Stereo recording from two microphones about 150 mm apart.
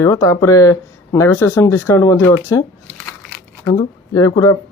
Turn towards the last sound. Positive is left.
turn(degrees=25)  # may be behind; listen again after turning